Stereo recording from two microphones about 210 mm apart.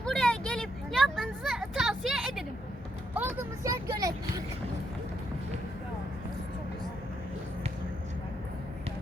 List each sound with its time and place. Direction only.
0.0 s vehicle: 5° left (ahead or behind)
3.2 s vehicle: 10° right (ahead or behind)